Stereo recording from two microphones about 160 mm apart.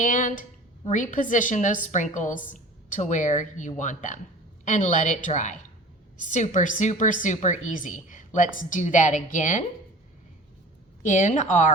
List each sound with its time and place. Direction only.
0.0 s a woman's voice: 55° left (ahead or behind)
11.0 s a woman's voice: 50° left (ahead or behind)